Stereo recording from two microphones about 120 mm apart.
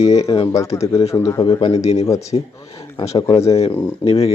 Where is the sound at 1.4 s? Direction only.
40° left (ahead or behind).